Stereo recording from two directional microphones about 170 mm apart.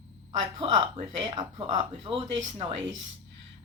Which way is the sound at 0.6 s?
35° right (ahead or behind).